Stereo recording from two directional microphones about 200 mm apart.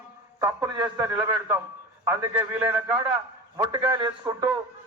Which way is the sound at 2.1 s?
10° right (ahead or behind).